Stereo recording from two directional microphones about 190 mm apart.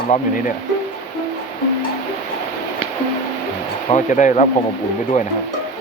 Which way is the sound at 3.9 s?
40° left (ahead or behind).